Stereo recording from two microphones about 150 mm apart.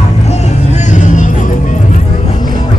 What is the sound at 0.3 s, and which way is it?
Vehicle, 50° left (ahead or behind).